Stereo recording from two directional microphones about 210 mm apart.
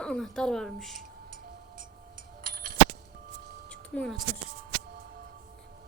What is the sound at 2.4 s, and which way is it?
Music, 45° right (ahead or behind).